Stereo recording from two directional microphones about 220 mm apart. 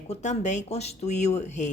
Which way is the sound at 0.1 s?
30° left (ahead or behind).